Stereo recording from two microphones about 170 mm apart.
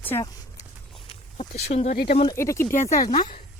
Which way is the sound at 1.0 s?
40° left (ahead or behind).